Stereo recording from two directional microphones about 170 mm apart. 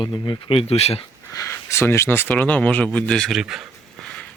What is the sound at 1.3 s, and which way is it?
Speech, 15° left (ahead or behind).